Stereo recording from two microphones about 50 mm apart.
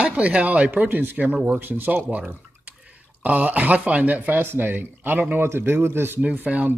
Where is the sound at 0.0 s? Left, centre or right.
Right.